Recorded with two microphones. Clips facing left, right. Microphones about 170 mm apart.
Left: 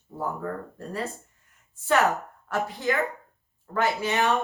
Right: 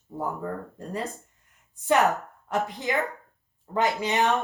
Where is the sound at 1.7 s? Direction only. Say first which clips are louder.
Right 1 dB; 15° right (ahead or behind).